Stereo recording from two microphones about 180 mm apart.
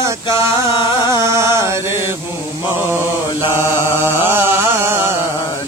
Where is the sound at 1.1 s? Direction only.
15° right (ahead or behind).